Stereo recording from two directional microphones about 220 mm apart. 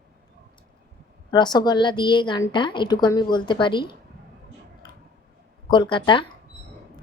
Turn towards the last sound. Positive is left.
turn(degrees=20)  # may be behind; listen again after turning